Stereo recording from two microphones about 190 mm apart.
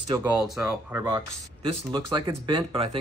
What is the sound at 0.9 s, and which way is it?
Speech, 20° right (ahead or behind).